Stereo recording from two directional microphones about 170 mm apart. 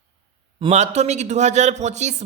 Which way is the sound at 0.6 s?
40° right (ahead or behind).